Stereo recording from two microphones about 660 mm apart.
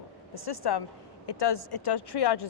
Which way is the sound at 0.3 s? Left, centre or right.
Left.